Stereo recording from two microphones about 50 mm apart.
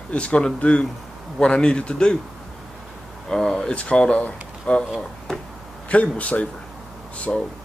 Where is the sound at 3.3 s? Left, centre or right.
Centre.